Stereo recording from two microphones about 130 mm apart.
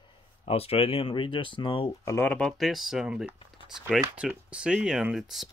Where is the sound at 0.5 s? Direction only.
50° left (ahead or behind).